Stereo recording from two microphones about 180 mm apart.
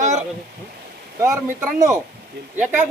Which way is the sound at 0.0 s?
40° right (ahead or behind).